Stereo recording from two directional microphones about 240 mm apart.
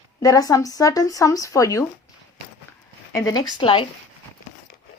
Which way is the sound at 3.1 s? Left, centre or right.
Centre.